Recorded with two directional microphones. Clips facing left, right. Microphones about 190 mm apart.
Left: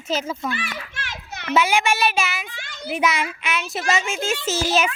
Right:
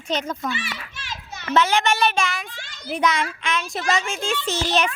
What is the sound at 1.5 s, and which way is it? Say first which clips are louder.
A woman's voice: even; 10° left (ahead or behind).